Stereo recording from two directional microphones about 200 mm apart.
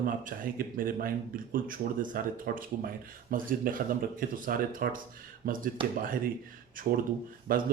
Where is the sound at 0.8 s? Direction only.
45° right (ahead or behind).